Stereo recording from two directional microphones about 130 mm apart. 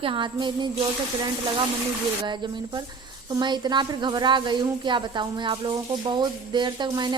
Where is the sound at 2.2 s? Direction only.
35° right (ahead or behind).